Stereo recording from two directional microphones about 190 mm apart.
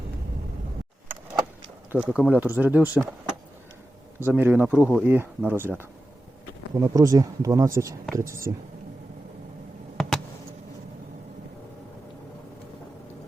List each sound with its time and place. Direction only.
1.9 s speech: 5° right (ahead or behind)
4.2 s speech: 10° right (ahead or behind)